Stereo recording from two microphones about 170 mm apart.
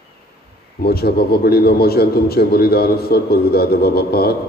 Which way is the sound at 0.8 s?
65° left (ahead or behind).